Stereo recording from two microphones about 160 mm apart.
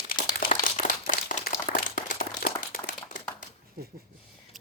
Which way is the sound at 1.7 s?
60° left (ahead or behind).